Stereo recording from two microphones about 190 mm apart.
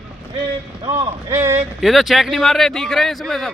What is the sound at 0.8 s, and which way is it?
Speech, 30° right (ahead or behind).